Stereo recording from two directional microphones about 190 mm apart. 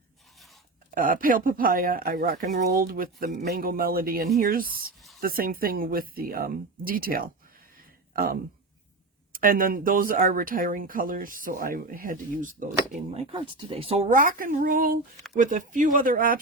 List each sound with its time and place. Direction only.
0.9 s speech: 45° right (ahead or behind)
13.3 s speech: 30° right (ahead or behind); by 16.4 s 50° right (ahead or behind)